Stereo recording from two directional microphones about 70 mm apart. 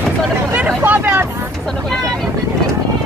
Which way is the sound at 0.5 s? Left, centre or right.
Right.